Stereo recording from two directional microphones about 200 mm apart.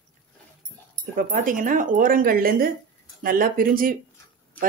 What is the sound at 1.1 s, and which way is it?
Speech, 45° right (ahead or behind).